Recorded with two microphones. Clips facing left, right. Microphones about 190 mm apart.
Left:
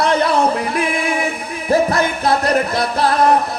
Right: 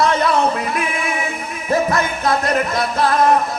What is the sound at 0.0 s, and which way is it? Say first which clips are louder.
Music: left 1 dB; 30° left (ahead or behind).